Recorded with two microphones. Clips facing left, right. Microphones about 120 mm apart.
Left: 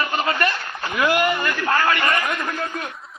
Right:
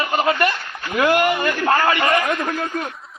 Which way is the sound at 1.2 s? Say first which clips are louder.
Right 3 dB; 25° right (ahead or behind).